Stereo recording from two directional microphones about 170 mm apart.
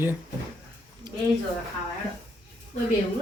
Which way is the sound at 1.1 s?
25° right (ahead or behind).